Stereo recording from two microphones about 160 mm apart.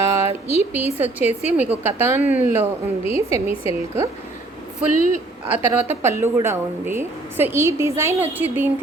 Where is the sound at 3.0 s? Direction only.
40° left (ahead or behind).